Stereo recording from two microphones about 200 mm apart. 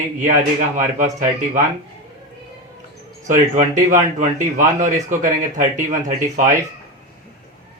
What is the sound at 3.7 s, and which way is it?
Speech, 15° right (ahead or behind).